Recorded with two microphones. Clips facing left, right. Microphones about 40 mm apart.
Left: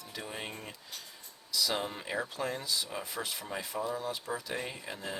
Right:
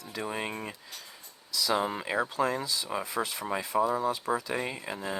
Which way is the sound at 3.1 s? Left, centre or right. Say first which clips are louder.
Right 7 dB; right.